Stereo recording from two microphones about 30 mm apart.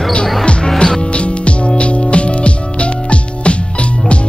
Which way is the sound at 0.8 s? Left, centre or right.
Left.